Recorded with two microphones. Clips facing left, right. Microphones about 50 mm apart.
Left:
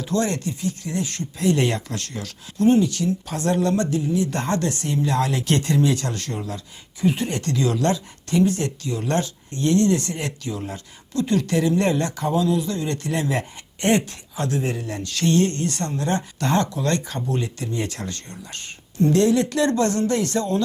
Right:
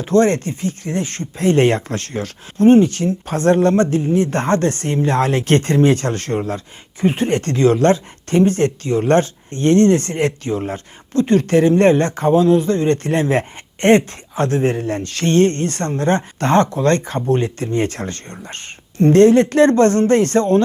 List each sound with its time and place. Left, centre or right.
0.0 s speech: right